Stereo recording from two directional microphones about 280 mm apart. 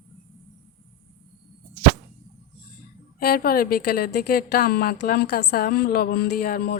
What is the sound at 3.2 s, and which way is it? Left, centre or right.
A woman's voice, left.